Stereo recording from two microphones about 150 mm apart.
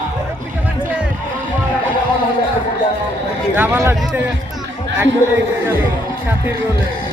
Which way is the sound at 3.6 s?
15° right (ahead or behind).